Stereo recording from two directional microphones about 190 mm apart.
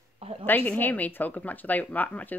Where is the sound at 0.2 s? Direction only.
30° right (ahead or behind).